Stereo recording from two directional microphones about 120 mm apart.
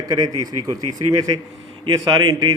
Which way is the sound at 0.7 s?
30° right (ahead or behind).